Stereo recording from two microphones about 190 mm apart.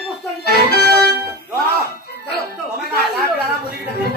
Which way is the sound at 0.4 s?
55° left (ahead or behind).